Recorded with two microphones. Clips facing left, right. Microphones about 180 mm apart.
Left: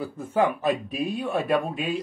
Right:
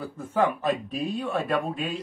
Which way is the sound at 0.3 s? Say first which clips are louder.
Left 1 dB; 10° left (ahead or behind).